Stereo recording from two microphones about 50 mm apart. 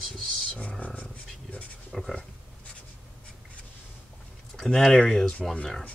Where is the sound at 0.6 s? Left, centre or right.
Left.